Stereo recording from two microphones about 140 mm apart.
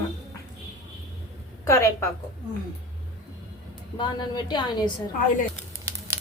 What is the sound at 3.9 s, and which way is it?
Speech, 30° left (ahead or behind).